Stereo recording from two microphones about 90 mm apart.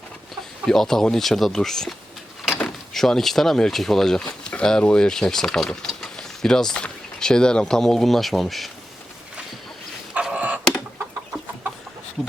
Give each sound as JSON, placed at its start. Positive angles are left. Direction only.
{"t": 0.6, "sound": "speech", "side_deg": 5}
{"t": 10.2, "sound": "chicken", "side_deg": -15}